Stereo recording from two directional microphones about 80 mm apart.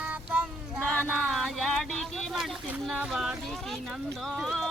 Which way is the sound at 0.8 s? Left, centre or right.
Centre.